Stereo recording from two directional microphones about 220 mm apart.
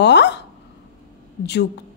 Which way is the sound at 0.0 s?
50° left (ahead or behind).